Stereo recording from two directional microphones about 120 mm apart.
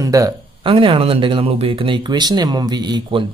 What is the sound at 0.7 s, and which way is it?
Speech, 45° right (ahead or behind).